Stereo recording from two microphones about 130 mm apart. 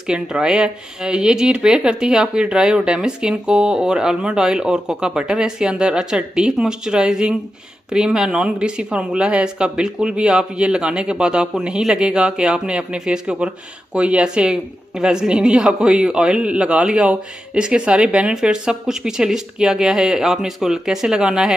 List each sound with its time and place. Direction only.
0.0 s speech: 5° right (ahead or behind)